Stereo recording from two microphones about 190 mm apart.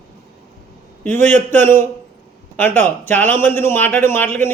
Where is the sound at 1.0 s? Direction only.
10° left (ahead or behind).